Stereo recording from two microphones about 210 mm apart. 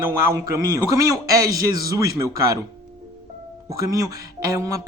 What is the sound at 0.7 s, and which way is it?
Speech, 15° right (ahead or behind).